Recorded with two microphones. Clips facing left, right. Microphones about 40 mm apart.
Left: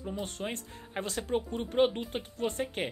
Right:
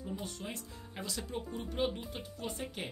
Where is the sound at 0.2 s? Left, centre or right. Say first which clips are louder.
Left 6 dB; left.